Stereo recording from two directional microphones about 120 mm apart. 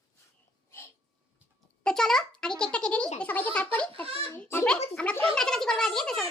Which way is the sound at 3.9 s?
50° right (ahead or behind).